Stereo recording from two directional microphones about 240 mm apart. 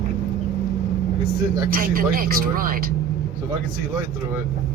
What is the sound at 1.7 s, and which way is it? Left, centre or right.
Speech, right.